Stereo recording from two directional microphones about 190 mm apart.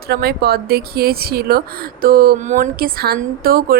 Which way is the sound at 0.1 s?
55° right (ahead or behind).